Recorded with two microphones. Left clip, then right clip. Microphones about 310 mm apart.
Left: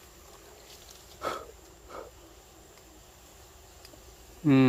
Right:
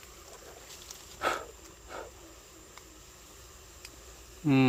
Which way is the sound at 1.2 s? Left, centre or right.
Centre.